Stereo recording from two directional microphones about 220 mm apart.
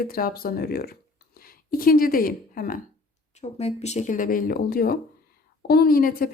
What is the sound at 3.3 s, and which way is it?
Speech, 30° left (ahead or behind).